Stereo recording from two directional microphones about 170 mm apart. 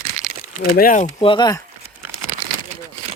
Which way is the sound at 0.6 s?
60° left (ahead or behind).